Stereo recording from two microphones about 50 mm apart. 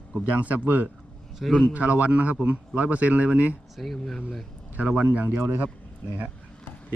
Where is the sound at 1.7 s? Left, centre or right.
Right.